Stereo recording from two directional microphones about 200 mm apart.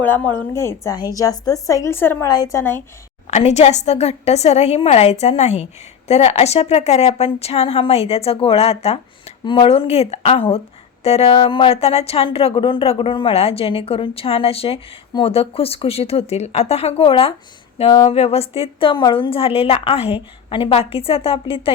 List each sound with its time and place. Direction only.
0.0 s a woman's voice: 10° left (ahead or behind)
3.2 s a woman's voice: 35° left (ahead or behind)
17.7 s a sound: 25° left (ahead or behind)
18.1 s speech: 30° left (ahead or behind)